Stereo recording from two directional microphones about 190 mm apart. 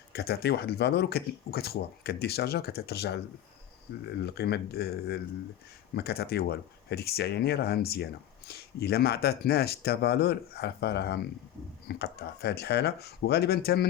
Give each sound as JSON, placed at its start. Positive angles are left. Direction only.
{"t": 0.1, "sound": "speech", "side_deg": 55}
{"t": 4.2, "sound": "speech", "side_deg": 60}